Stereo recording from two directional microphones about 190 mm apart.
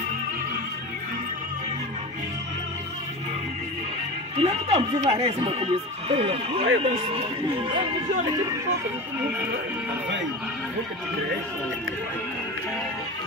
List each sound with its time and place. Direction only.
4.4 s speech: 30° right (ahead or behind)